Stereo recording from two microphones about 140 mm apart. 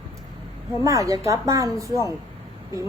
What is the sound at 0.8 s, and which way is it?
Speech, 25° right (ahead or behind).